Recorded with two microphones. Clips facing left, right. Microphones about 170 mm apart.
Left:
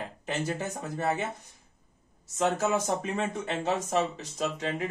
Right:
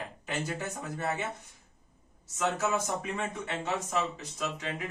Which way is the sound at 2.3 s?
25° left (ahead or behind).